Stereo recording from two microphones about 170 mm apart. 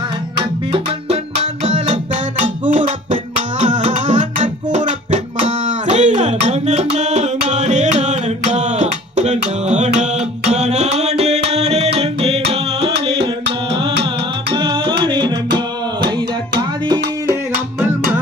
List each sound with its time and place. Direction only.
0.3 s music: 35° right (ahead or behind)
14.5 s music: 30° right (ahead or behind)